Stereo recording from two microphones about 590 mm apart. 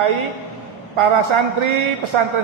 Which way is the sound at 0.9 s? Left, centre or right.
Right.